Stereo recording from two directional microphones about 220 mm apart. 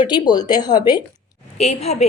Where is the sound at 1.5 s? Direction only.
30° left (ahead or behind).